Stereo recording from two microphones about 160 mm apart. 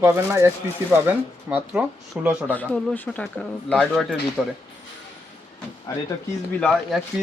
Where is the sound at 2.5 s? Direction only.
10° left (ahead or behind).